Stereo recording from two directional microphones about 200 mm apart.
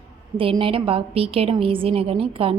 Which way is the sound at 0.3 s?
25° right (ahead or behind).